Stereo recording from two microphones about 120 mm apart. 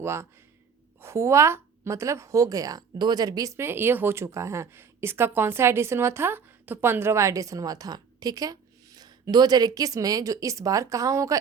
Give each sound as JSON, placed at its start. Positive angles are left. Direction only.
{"t": 0.0, "sound": "a woman's voice", "side_deg": -20}